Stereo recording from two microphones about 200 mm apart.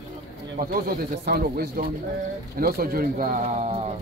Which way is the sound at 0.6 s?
50° right (ahead or behind).